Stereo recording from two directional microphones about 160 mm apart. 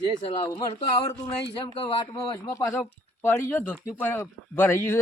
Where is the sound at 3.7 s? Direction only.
10° right (ahead or behind).